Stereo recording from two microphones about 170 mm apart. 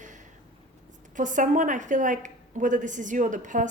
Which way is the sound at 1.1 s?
50° right (ahead or behind).